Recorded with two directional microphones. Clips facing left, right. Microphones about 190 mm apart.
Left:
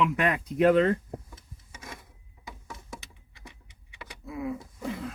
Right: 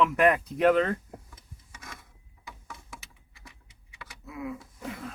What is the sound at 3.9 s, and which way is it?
Vehicle, 25° left (ahead or behind).